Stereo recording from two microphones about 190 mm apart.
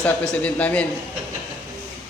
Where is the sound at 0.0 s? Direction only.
5° left (ahead or behind).